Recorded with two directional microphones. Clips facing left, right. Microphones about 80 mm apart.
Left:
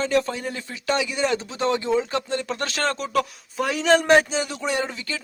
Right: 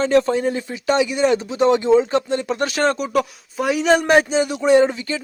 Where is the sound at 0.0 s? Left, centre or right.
Right.